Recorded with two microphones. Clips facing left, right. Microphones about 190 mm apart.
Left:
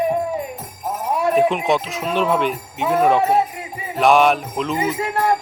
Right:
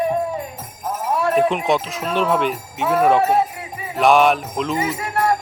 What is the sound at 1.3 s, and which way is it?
Speech, centre (ahead or behind).